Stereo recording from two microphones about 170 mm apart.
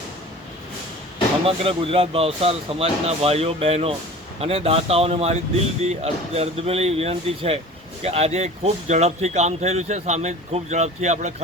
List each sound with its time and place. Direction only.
1.5 s speech: 35° right (ahead or behind)